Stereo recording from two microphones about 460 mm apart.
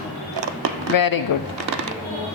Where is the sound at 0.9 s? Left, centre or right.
Left.